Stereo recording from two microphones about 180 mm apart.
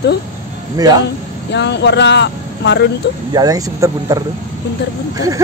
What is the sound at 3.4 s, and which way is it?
Speech, 20° right (ahead or behind).